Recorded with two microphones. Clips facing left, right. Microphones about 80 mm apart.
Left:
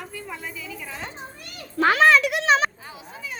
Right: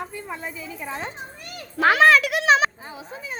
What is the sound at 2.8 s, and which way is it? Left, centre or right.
Speech, right.